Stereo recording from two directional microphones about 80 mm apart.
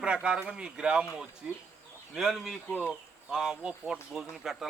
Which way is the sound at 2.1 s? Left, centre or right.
Centre.